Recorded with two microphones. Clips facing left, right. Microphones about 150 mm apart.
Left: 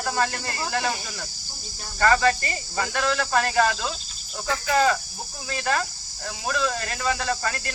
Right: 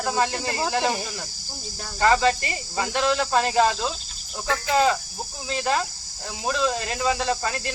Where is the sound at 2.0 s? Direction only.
20° right (ahead or behind).